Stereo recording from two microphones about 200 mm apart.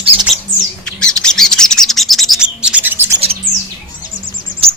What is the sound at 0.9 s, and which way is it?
Bird, 5° left (ahead or behind).